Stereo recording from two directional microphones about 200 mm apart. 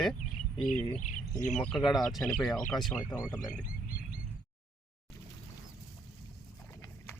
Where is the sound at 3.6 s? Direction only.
45° left (ahead or behind).